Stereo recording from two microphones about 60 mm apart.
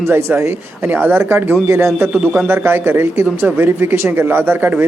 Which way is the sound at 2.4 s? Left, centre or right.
Right.